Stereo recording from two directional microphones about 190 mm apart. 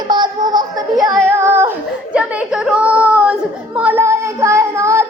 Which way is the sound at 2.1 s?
5° right (ahead or behind).